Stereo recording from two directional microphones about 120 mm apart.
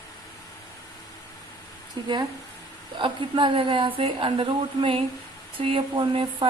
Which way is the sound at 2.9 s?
45° right (ahead or behind).